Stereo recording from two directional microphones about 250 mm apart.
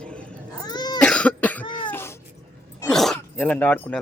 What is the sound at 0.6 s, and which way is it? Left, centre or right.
Cough, centre.